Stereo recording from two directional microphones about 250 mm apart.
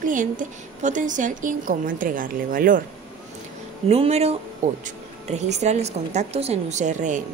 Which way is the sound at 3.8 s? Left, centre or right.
Right.